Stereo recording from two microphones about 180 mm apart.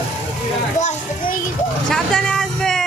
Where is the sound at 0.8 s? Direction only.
45° left (ahead or behind).